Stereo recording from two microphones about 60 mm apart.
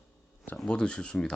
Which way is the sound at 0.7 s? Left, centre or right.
Centre.